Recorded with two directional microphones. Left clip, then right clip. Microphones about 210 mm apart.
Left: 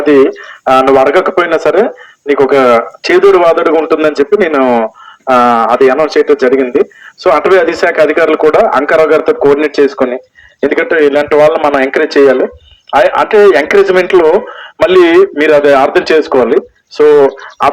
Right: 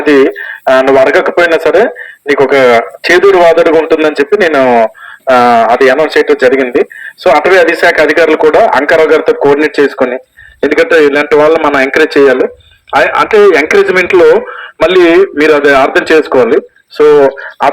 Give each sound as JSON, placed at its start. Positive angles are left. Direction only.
{"t": 0.0, "sound": "a man's voice", "side_deg": 45}